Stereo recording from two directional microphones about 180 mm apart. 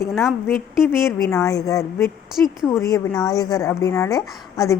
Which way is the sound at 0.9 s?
15° left (ahead or behind).